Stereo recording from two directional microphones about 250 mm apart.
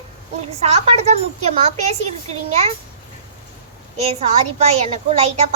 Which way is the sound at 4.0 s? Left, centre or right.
Right.